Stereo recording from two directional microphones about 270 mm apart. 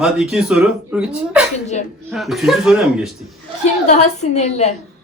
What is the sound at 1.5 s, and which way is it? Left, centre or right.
Speech, left.